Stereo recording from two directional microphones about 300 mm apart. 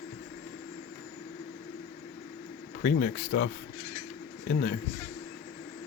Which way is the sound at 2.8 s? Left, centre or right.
Left.